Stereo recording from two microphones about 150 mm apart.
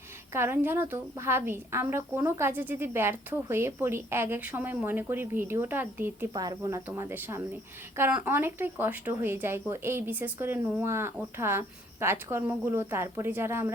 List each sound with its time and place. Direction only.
0.3 s a woman's voice: 15° right (ahead or behind)
6.3 s a woman's voice: 25° right (ahead or behind)